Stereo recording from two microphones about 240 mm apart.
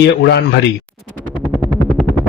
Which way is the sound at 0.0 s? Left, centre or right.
Left.